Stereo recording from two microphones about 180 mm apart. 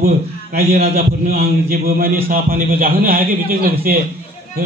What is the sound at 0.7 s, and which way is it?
A man's voice, 55° right (ahead or behind).